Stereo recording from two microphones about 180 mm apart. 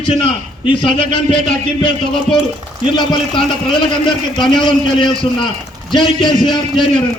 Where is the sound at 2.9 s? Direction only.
25° left (ahead or behind).